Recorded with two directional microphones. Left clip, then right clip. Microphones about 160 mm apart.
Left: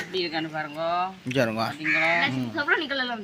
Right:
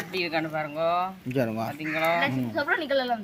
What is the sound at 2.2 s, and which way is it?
Speech, 70° right (ahead or behind).